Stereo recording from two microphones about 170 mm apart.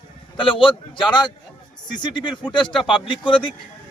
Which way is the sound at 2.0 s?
25° left (ahead or behind).